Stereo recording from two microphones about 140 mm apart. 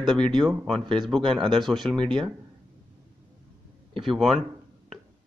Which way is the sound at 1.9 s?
35° right (ahead or behind).